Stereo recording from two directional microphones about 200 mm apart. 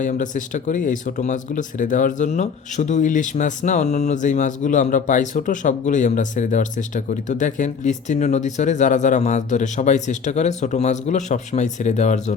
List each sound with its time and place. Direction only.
0.0 s speech: 40° left (ahead or behind)